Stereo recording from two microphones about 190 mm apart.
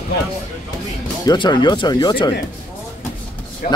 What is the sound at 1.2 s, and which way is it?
Speech, 25° left (ahead or behind).